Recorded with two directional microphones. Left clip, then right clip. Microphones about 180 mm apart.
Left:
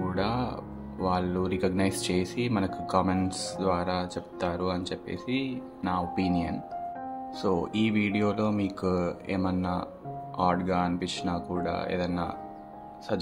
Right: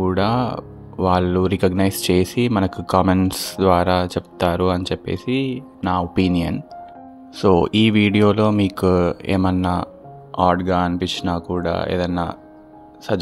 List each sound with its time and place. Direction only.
0.0 s speech: 50° right (ahead or behind)